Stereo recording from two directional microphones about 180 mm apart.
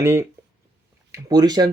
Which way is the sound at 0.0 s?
15° right (ahead or behind).